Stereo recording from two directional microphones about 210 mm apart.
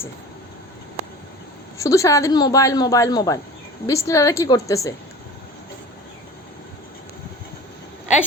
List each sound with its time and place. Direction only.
1.8 s a woman's voice: 15° left (ahead or behind)